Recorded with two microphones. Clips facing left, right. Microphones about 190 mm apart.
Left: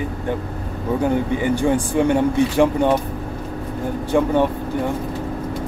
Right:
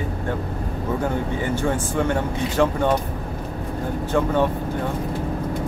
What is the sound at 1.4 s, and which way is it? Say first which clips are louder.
Speech: left 5 dB; 15° left (ahead or behind).